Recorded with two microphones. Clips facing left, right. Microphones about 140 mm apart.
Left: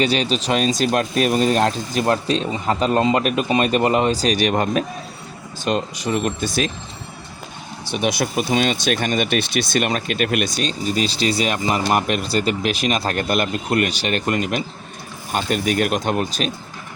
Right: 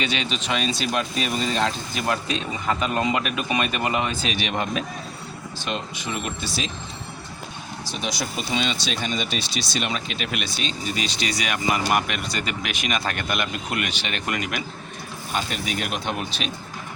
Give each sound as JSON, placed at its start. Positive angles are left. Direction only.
{"t": 0.0, "sound": "speech", "side_deg": 35}
{"t": 7.9, "sound": "speech", "side_deg": 60}
{"t": 10.6, "sound": "speech", "side_deg": 40}
{"t": 15.3, "sound": "speech", "side_deg": 50}